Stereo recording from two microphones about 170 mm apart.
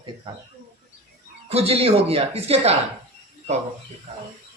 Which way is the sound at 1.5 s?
35° right (ahead or behind).